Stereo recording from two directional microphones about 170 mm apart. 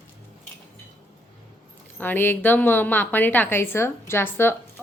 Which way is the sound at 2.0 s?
10° left (ahead or behind).